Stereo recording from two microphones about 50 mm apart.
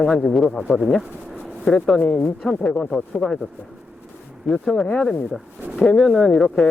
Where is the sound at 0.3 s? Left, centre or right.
Centre.